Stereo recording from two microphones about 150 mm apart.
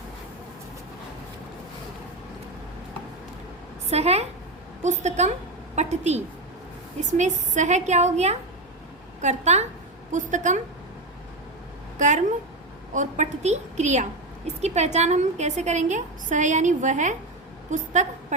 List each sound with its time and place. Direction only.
3.8 s a woman's voice: 45° right (ahead or behind)
11.9 s a woman's voice: 55° right (ahead or behind)